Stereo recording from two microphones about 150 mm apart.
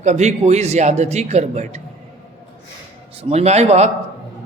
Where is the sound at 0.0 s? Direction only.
50° right (ahead or behind).